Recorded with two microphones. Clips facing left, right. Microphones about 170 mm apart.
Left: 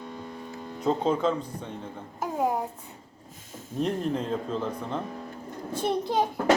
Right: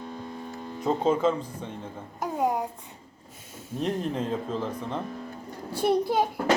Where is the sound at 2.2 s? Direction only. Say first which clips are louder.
Even; 5° left (ahead or behind).